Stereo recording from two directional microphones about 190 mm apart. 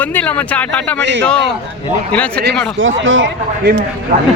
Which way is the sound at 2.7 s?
90° right.